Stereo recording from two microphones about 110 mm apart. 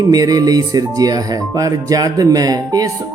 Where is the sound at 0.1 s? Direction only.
35° right (ahead or behind).